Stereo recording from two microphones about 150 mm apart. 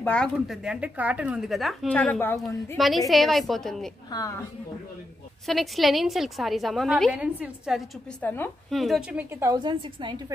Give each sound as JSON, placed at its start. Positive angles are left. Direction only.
{"t": 0.0, "sound": "speech", "side_deg": 5}
{"t": 0.7, "sound": "a woman's voice", "side_deg": -10}
{"t": 4.1, "sound": "a woman's voice", "side_deg": 25}
{"t": 5.5, "sound": "a woman's voice", "side_deg": 0}
{"t": 8.2, "sound": "speech", "side_deg": 15}
{"t": 8.6, "sound": "a woman's voice", "side_deg": 0}
{"t": 9.4, "sound": "a woman's voice", "side_deg": -25}